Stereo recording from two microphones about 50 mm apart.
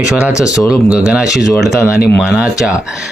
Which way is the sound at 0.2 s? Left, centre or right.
Right.